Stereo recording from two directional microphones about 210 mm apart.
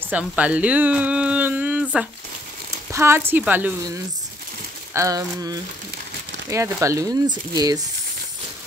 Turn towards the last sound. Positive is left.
turn(degrees=-20)  # may be behind; listen again after turning